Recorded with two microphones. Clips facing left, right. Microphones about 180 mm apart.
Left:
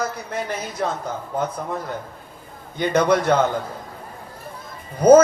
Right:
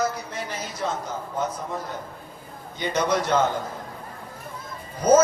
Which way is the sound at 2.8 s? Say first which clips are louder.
Left 6 dB; 55° left (ahead or behind).